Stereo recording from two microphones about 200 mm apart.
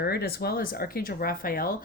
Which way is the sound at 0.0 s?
55° left (ahead or behind).